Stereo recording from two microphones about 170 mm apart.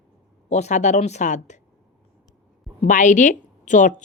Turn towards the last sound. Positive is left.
turn(degrees=45)  # may be behind; listen again after turning